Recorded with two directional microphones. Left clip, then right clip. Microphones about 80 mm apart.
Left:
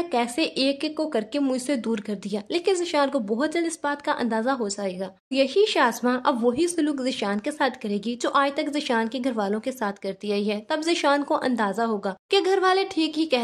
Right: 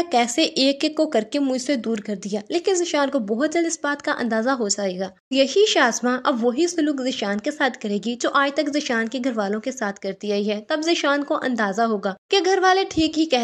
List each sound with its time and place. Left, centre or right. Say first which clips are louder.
0.1 s a woman's voice: right 6 dB; right
2.0 s speech: right 3 dB; centre
3.8 s a woman's voice: right 2 dB; right
5.3 s a woman's voice: right 3 dB; right
6.4 s speech: right 2 dB; centre
7.2 s speech: right 3 dB; right
11.6 s speech: right 4 dB; right
12.3 s speech: right 3 dB; centre